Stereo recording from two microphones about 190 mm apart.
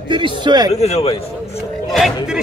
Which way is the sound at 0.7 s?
35° left (ahead or behind).